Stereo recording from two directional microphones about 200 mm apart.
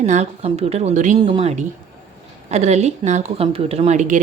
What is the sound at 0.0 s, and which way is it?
Speech, 35° right (ahead or behind).